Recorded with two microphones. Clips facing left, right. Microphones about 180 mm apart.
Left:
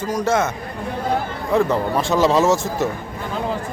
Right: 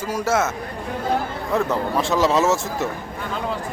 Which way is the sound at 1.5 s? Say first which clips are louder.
Left 3 dB; centre (ahead or behind).